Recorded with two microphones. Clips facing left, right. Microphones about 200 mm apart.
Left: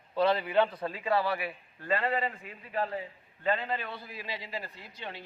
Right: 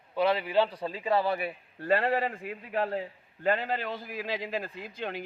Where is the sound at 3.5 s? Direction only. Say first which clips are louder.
Right 3 dB; 90° right.